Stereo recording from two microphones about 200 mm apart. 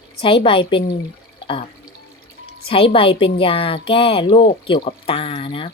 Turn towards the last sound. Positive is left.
turn(degrees=25)  # may be behind; listen again after turning